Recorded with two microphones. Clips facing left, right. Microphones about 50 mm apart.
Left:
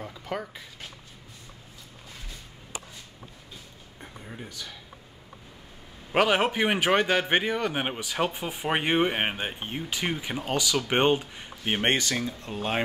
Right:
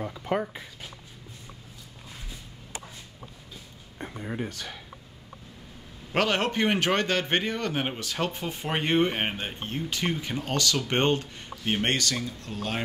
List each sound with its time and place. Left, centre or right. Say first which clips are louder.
0.0 s speech: right 5 dB; centre
4.0 s speech: right 8 dB; right
6.1 s a man's voice: left 2 dB; centre